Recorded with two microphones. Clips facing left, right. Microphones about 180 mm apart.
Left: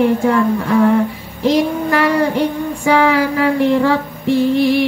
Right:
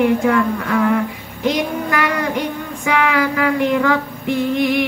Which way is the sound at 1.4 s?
30° left (ahead or behind).